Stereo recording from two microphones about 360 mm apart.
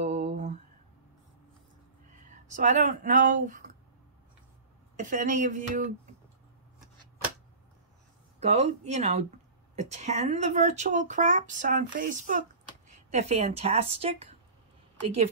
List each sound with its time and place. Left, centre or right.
0.0 s a sound: centre
2.2 s speech: centre
4.9 s speech: right
8.4 s speech: centre